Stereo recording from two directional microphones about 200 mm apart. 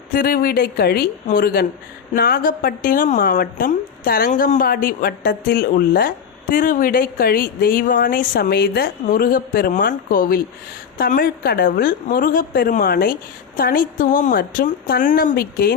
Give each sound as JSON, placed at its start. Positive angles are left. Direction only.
{"t": 0.1, "sound": "a woman's voice", "side_deg": 45}